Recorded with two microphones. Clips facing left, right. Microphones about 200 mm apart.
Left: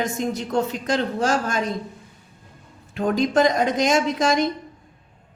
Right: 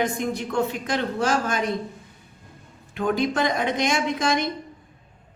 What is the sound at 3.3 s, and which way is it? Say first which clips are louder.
A woman's voice: left 5 dB; 40° left (ahead or behind).